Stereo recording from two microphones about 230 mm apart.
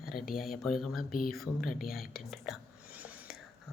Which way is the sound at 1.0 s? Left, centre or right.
Left.